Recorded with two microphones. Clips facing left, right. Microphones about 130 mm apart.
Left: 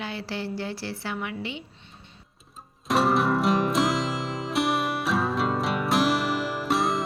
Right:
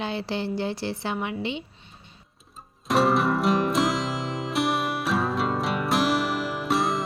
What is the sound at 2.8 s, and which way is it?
Music, centre (ahead or behind).